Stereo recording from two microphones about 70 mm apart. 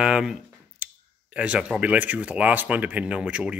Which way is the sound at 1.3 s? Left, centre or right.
Centre.